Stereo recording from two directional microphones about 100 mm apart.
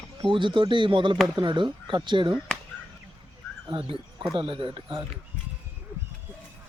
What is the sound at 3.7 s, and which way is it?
Speech, 65° right (ahead or behind).